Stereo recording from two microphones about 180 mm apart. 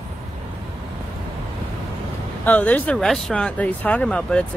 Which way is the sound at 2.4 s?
10° left (ahead or behind).